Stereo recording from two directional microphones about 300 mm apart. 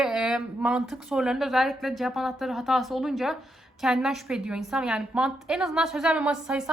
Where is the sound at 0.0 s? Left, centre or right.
Centre.